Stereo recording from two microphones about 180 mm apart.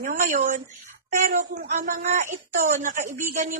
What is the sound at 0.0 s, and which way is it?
Speech, 45° right (ahead or behind).